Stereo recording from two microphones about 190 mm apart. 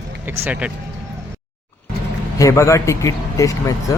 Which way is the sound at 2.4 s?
15° left (ahead or behind).